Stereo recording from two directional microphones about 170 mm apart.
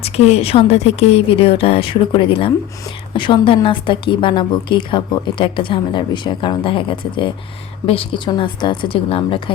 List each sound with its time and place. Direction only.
0.0 s a woman's voice: 35° left (ahead or behind)